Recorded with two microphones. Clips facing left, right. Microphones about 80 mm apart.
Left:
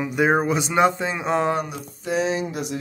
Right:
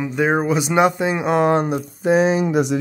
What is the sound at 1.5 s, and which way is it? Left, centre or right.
Speech, right.